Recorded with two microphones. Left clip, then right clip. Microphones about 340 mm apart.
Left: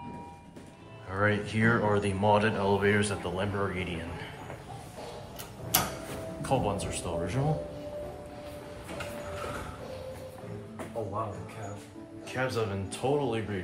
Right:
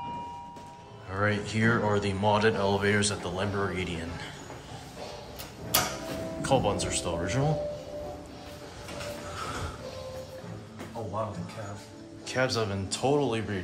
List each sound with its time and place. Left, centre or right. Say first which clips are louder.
1.1 s speech: even; centre
3.7 s speech: right 2 dB; right
6.4 s speech: right 3 dB; centre
12.3 s speech: right 3 dB; centre